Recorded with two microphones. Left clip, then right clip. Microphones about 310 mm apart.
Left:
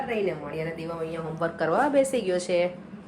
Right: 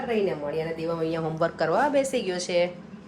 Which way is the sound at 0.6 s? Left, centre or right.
Right.